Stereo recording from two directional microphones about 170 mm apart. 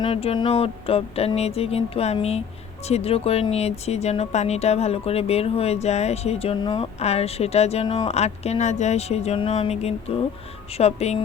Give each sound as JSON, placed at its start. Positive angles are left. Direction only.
{"t": 0.0, "sound": "speech", "side_deg": 35}